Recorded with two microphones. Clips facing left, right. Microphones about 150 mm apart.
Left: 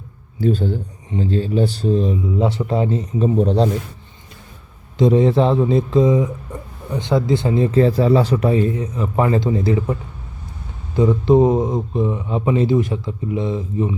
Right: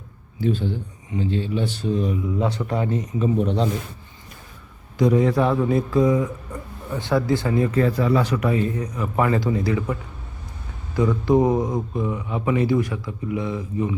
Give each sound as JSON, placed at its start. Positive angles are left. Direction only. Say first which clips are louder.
{"t": 0.3, "sound": "speech", "louder": "left 4 dB", "side_deg": 40}
{"t": 4.9, "sound": "speech", "louder": "left 4 dB", "side_deg": 25}